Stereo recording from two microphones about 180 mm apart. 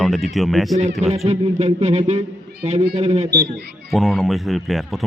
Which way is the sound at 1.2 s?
35° right (ahead or behind).